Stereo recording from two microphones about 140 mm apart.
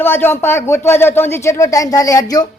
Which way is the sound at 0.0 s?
15° left (ahead or behind).